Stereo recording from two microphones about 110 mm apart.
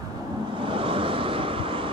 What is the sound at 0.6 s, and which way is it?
Vehicle, 55° right (ahead or behind).